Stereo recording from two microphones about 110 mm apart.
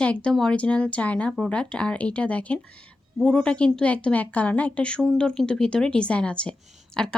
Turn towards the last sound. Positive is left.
turn(degrees=5)  # may be behind; listen again after turning